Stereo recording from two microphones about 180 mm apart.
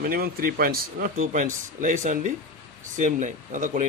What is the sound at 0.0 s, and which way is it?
Speech, 55° right (ahead or behind).